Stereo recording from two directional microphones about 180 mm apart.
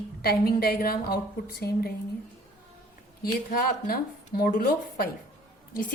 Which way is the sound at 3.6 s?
55° left (ahead or behind).